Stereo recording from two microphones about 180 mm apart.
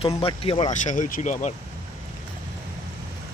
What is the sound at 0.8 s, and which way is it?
Speech, 45° left (ahead or behind).